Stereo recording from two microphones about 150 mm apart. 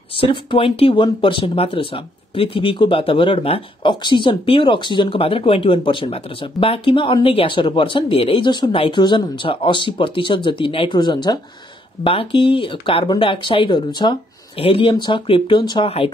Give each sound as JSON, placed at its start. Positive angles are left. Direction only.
{"t": 0.2, "sound": "speech", "side_deg": 35}